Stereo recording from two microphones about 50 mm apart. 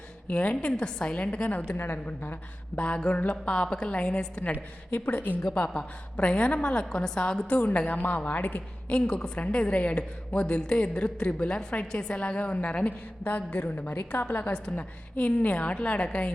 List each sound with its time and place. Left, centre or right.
0.3 s a woman's voice: left
1.7 s a woman's voice: left
2.7 s a woman's voice: left
4.9 s a woman's voice: left
5.5 s a woman's voice: left